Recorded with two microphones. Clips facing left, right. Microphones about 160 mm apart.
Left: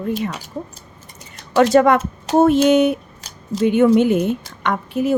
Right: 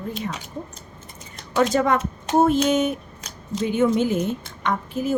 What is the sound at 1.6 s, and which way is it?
A woman's voice, 75° left (ahead or behind).